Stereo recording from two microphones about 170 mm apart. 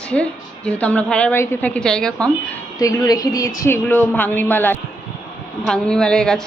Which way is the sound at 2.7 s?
20° left (ahead or behind).